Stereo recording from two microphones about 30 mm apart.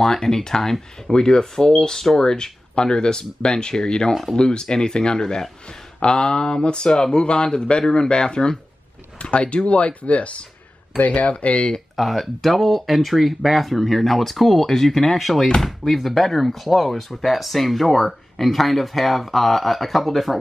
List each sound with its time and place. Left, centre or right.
0.0 s speech: centre
9.2 s speech: left
12.0 s speech: centre
15.1 s speech: centre